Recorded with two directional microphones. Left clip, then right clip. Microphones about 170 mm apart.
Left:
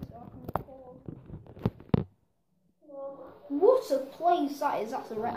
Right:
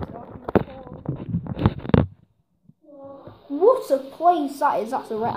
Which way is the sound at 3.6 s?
45° right (ahead or behind).